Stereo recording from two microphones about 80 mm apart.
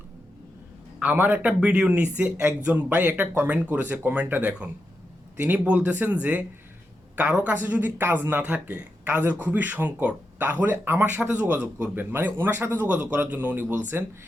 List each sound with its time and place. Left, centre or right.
0.9 s speech: right